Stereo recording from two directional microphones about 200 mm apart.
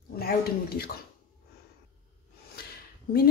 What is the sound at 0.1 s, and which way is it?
Speech, 50° left (ahead or behind).